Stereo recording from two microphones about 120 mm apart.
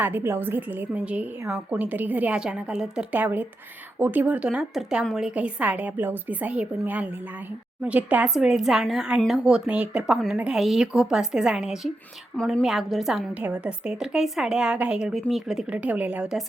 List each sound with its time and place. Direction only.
0.0 s a woman's voice: 20° right (ahead or behind)